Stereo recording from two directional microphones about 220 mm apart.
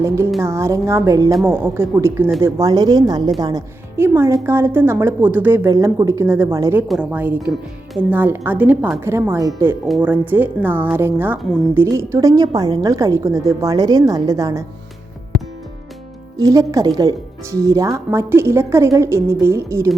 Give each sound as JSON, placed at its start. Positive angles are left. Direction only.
{"t": 0.4, "sound": "speech", "side_deg": -10}
{"t": 16.4, "sound": "speech", "side_deg": -15}